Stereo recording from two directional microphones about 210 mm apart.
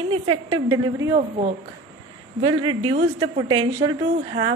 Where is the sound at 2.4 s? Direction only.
25° right (ahead or behind).